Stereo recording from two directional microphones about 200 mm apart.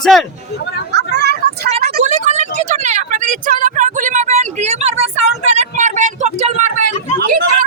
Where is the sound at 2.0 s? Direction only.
35° right (ahead or behind).